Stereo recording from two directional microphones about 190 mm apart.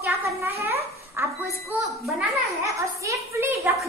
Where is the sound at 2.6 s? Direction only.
15° right (ahead or behind).